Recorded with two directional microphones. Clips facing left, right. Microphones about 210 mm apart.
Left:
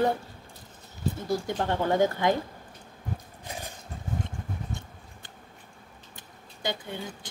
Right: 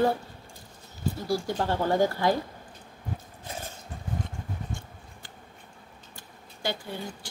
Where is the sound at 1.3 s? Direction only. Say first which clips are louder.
Right 1 dB; 20° left (ahead or behind).